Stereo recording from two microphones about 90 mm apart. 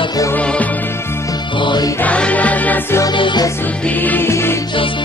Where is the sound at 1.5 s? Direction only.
60° left (ahead or behind).